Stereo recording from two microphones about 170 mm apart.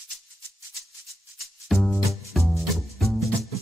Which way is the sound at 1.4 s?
Centre (ahead or behind).